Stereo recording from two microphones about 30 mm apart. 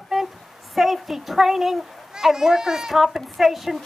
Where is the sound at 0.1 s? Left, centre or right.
Centre.